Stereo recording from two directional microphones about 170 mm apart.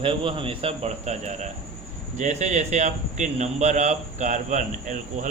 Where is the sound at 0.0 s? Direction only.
30° right (ahead or behind).